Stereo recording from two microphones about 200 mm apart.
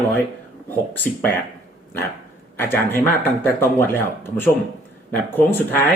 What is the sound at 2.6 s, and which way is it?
Speech, 10° left (ahead or behind).